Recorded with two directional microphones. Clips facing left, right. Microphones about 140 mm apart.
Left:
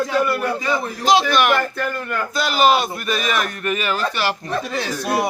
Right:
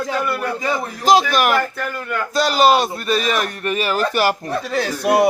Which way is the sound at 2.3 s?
40° right (ahead or behind).